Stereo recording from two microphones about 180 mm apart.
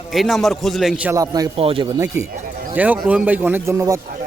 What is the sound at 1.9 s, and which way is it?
Speech, 15° right (ahead or behind).